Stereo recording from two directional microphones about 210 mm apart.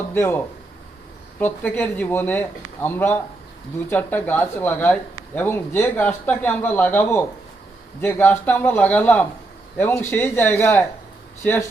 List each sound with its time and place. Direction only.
0.1 s speech: 10° left (ahead or behind)